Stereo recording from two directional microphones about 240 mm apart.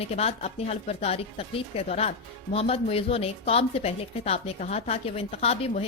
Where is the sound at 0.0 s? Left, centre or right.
Left.